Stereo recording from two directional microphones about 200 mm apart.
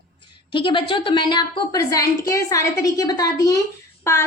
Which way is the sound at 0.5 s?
25° left (ahead or behind).